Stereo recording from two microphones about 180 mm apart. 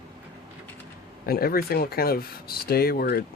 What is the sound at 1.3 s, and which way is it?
Speech, 55° left (ahead or behind).